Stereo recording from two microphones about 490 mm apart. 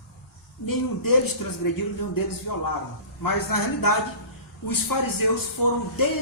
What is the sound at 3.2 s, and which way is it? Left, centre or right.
A man's voice, left.